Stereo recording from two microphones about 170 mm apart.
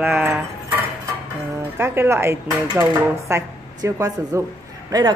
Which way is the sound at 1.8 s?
15° right (ahead or behind).